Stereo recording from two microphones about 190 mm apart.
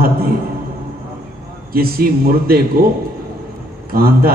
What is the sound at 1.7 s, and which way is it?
Speech, 50° right (ahead or behind).